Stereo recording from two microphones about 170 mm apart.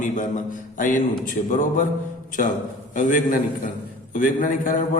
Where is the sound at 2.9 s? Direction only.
50° left (ahead or behind).